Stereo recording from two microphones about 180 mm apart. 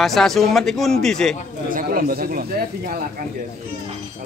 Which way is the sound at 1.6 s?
50° right (ahead or behind).